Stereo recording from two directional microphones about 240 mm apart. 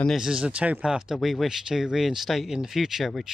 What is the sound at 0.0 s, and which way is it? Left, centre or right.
Speech, centre.